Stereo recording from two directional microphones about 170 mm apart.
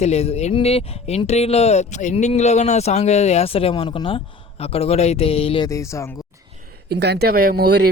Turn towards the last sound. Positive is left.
turn(degrees=-70)  # may be behind; listen again after turning